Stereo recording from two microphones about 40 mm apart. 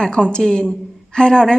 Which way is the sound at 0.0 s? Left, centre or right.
Left.